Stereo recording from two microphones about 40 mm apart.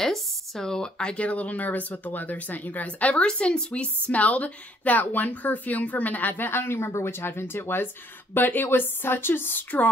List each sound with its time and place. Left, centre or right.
0.0 s speech: centre; by 3.2 s left
3.2 s a woman's voice: left
8.4 s a woman's voice: left
8.6 s a woman's voice: left